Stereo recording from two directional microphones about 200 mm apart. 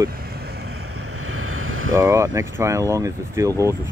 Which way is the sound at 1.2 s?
90° right.